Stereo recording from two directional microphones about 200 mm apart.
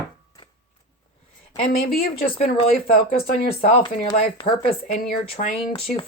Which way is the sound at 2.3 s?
30° left (ahead or behind).